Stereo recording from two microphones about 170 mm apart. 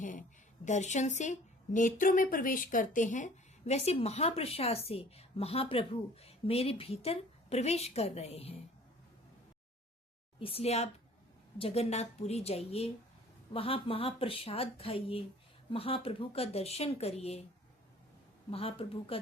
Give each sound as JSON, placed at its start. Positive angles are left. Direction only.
{"t": 0.0, "sound": "a woman's voice", "side_deg": 50}
{"t": 10.4, "sound": "a woman's voice", "side_deg": 35}
{"t": 18.5, "sound": "a woman's voice", "side_deg": 35}